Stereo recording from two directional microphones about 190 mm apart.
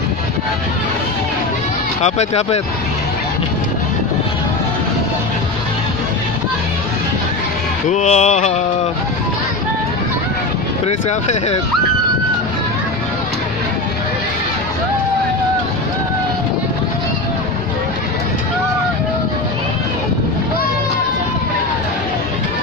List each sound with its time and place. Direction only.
2.0 s music: 35° left (ahead or behind)
7.9 s music: 35° left (ahead or behind)
11.1 s music: 35° left (ahead or behind)